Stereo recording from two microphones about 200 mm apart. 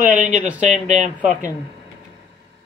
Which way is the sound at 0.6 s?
35° right (ahead or behind).